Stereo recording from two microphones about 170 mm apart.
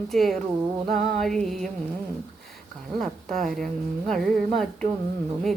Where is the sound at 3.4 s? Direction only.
Centre (ahead or behind).